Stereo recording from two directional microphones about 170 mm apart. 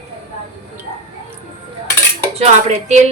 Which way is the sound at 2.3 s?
40° right (ahead or behind).